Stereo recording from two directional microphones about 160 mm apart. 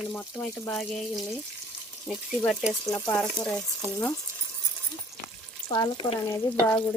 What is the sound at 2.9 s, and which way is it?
Speech, 10° left (ahead or behind).